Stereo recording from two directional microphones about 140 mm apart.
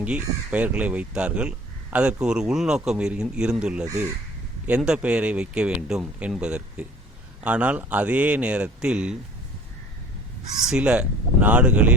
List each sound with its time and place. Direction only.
0.0 s speech: 10° right (ahead or behind)
3.8 s speech: 20° right (ahead or behind)
4.6 s speech: 5° right (ahead or behind)
10.7 s speech: 5° right (ahead or behind)